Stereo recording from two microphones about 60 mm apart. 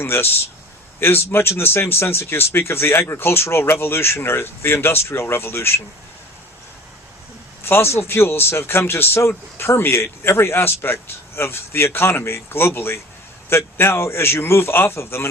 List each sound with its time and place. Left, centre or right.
0.0 s a man's voice: left
7.6 s a man's voice: left